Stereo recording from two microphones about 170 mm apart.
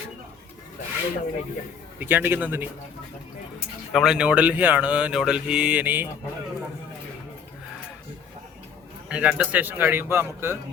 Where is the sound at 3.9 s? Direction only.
Centre (ahead or behind).